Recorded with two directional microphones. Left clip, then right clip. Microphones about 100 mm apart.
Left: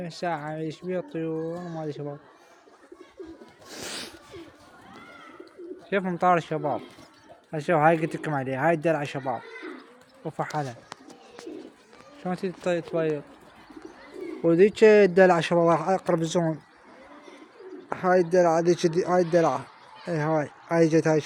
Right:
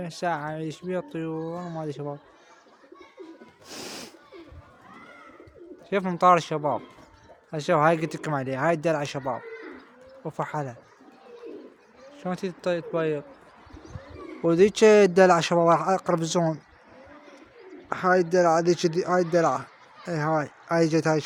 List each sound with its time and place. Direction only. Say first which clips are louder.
0.0 s a child's voice: right 2 dB; 55° right (ahead or behind)
3.7 s sneeze: left 2 dB; 45° right (ahead or behind)
5.9 s a child's voice: even; 55° right (ahead or behind)
6.2 s speech: right 4 dB; 45° right (ahead or behind)
7.5 s speech: even; 30° right (ahead or behind)
12.2 s speech: even; 30° right (ahead or behind)
14.4 s speech: even; 35° right (ahead or behind)
17.8 s speech: even; 25° right (ahead or behind)